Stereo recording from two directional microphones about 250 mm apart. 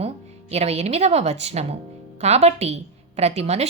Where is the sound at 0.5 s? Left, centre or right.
Right.